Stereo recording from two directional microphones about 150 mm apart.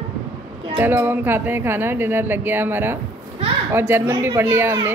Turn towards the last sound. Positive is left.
turn(degrees=-15)  # may be behind; listen again after turning